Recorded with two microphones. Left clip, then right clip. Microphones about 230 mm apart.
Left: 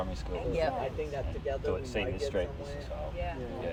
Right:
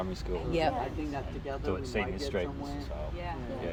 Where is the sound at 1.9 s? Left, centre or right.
Right.